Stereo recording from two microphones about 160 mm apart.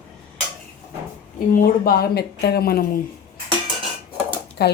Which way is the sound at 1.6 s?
70° left (ahead or behind).